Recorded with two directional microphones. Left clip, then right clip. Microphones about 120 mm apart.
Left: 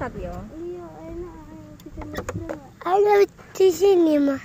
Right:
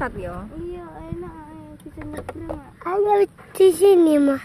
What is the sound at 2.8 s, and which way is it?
Speech, 15° left (ahead or behind).